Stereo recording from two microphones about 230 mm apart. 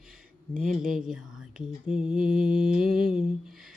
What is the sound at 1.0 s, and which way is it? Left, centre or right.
Whispering, centre.